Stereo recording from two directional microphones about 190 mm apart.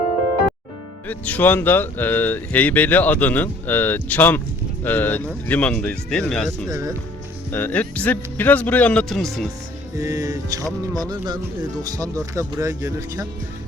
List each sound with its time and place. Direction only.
1.0 s speech: 10° left (ahead or behind)
6.7 s speech: 15° right (ahead or behind)
7.5 s speech: 10° left (ahead or behind)
10.0 s music: 15° right (ahead or behind)
11.8 s speech: 20° right (ahead or behind)